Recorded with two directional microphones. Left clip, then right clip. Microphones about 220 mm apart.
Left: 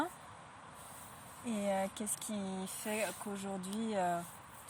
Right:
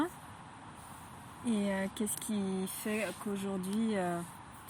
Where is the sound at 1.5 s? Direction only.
10° left (ahead or behind).